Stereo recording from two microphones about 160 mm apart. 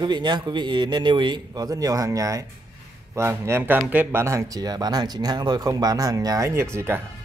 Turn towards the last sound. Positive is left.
turn(degrees=-15)  # may be behind; listen again after turning